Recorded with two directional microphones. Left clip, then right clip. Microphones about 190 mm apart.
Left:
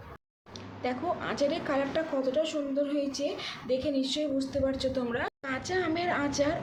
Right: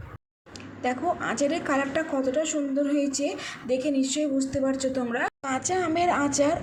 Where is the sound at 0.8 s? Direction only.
20° right (ahead or behind).